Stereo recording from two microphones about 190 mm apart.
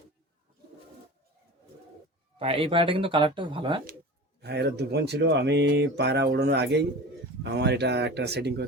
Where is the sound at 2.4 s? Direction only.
30° right (ahead or behind).